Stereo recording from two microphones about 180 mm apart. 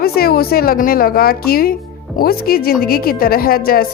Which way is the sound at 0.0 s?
55° left (ahead or behind).